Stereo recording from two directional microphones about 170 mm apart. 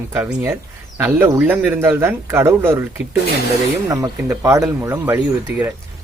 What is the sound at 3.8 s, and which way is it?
Speech, 15° right (ahead or behind).